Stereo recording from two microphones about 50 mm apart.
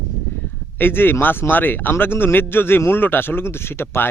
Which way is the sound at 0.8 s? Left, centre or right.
Left.